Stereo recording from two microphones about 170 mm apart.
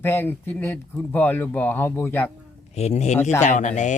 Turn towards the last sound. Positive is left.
turn(degrees=45)  # may be behind; listen again after turning